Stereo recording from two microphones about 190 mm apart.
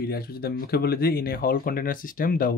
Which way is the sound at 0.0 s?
55° left (ahead or behind).